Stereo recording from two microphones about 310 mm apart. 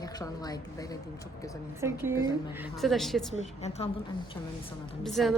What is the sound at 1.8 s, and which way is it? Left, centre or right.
A woman's voice, centre.